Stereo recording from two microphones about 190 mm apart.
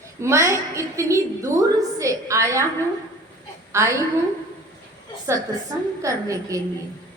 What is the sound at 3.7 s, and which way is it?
Speech, 15° right (ahead or behind).